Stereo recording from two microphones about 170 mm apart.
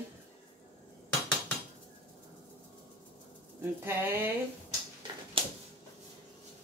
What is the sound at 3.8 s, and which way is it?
Speech, 10° right (ahead or behind).